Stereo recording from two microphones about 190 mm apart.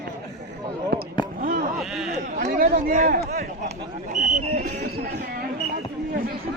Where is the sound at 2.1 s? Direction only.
40° right (ahead or behind).